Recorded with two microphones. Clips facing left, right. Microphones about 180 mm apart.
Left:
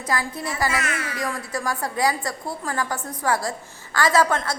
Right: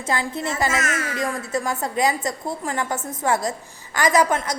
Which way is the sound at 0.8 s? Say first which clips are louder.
Right 3 dB; 45° right (ahead or behind).